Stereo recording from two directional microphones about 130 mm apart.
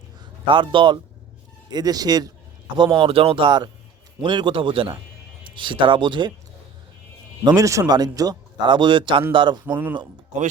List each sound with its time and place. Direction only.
0.4 s speech: 40° right (ahead or behind)
7.4 s speech: 25° right (ahead or behind)
9.6 s speech: 15° right (ahead or behind)